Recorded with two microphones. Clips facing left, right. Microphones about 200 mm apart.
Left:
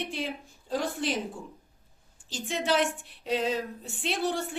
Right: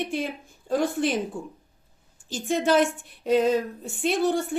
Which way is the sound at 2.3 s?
45° right (ahead or behind).